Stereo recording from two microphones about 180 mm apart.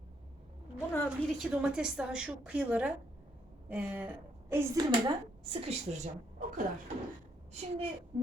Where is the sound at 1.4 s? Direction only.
5° right (ahead or behind).